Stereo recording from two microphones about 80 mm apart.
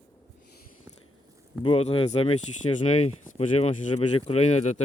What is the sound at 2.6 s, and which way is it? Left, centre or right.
Speech, left.